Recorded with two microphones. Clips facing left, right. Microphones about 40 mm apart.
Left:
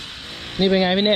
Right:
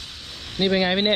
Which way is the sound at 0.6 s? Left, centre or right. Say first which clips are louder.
Left 3 dB; left.